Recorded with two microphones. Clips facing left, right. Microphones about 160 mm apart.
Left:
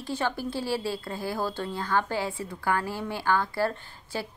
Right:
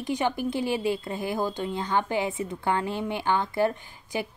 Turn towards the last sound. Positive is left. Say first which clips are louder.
# right 3 dB
turn(degrees=-20)  # may be behind; listen again after turning